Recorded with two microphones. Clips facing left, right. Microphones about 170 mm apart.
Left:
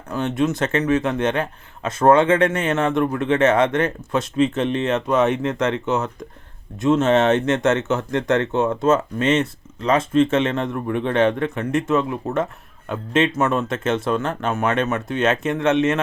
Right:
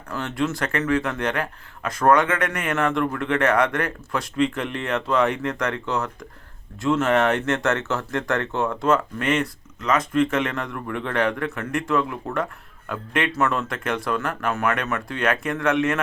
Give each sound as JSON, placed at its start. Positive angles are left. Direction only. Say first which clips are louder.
{"t": 0.1, "sound": "speech", "louder": "left 5 dB", "side_deg": 20}